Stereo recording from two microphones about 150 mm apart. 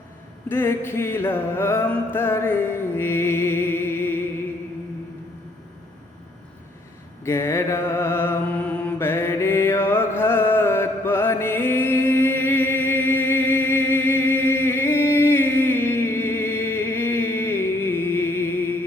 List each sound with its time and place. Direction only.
0.4 s mantra: 15° left (ahead or behind)
2.1 s music: 15° left (ahead or behind)
7.3 s mantra: 15° left (ahead or behind)